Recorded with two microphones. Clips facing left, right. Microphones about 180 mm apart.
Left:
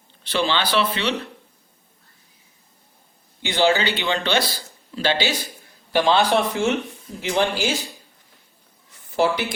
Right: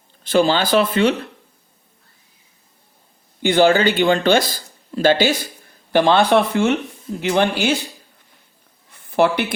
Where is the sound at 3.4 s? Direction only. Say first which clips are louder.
Right 5 dB; 50° right (ahead or behind).